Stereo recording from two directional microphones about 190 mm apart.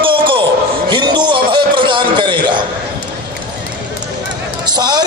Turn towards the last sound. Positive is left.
turn(degrees=-20)  # may be behind; listen again after turning